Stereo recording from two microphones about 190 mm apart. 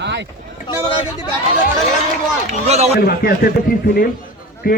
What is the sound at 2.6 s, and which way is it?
Speech, 35° right (ahead or behind).